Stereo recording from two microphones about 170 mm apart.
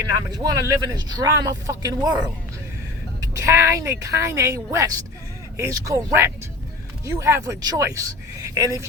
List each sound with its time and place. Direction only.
0.3 s speech: 25° right (ahead or behind)
3.2 s speech: 15° right (ahead or behind)